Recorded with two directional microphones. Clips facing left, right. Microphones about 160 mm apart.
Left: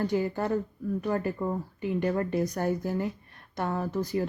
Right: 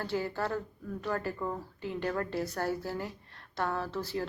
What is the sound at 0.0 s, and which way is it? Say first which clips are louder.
Speech: left 5 dB; 15° left (ahead or behind).